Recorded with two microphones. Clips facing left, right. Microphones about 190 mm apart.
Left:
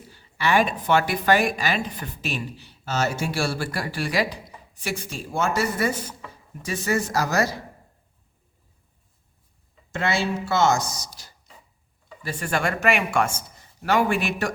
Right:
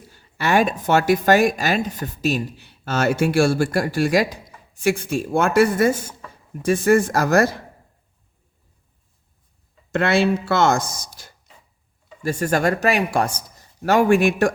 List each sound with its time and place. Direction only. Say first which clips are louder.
0.1 s speech: right 3 dB; 45° right (ahead or behind)
9.9 s speech: right 7 dB; 60° right (ahead or behind)